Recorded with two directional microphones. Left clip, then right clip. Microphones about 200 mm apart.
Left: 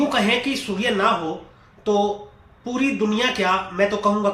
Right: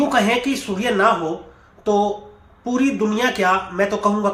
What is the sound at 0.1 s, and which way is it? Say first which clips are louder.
Speech: right 2 dB; 20° right (ahead or behind).